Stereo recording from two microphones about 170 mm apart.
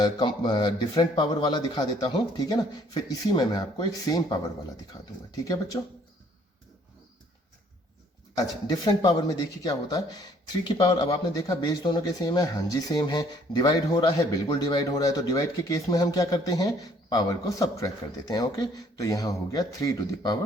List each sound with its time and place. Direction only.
0.0 s speech: 25° left (ahead or behind)
8.4 s speech: 20° left (ahead or behind)